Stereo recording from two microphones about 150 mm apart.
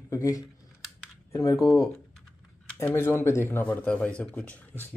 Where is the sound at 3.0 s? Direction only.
15° left (ahead or behind).